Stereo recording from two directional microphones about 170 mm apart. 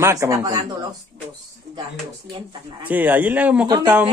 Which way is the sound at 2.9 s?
10° right (ahead or behind).